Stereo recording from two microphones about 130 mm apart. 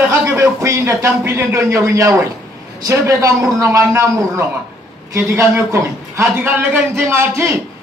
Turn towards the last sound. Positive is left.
turn(degrees=-20)  # may be behind; listen again after turning